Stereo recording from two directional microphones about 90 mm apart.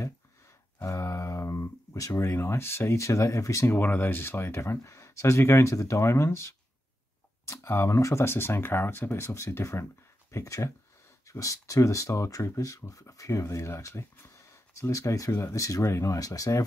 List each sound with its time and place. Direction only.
0.8 s speech: 35° left (ahead or behind)
3.7 s speech: 20° left (ahead or behind); by 16.6 s 40° left (ahead or behind)